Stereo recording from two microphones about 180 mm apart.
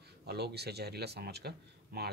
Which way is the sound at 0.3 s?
65° right (ahead or behind).